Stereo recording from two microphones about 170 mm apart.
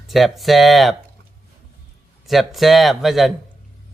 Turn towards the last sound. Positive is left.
turn(degrees=0)  # may be behind; listen again after turning